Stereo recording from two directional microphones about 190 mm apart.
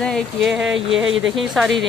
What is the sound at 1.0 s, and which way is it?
Speech, 90° right.